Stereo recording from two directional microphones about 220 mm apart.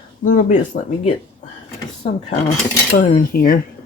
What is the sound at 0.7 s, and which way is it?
Speech, 40° left (ahead or behind).